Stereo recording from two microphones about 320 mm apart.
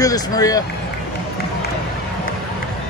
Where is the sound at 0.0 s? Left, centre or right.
Centre.